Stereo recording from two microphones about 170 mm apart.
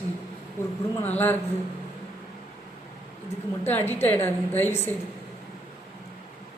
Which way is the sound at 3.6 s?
10° left (ahead or behind).